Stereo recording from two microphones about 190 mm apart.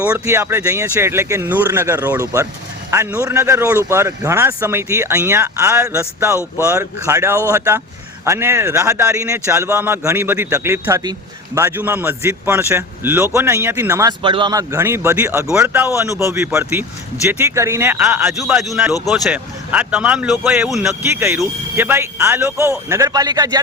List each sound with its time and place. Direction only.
0.0 s a man's voice: 10° right (ahead or behind)
21.2 s a man's voice: 15° right (ahead or behind)